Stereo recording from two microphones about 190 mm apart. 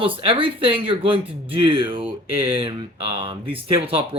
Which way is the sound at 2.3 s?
10° right (ahead or behind).